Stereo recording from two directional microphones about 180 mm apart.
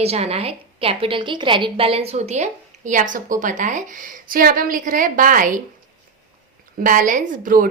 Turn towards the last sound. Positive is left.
turn(degrees=-50)  # may be behind; listen again after turning